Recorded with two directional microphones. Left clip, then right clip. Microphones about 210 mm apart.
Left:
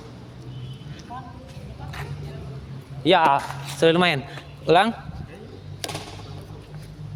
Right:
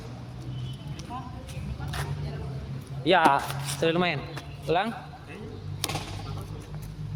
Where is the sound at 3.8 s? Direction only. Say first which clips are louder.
Left 8 dB; 50° left (ahead or behind).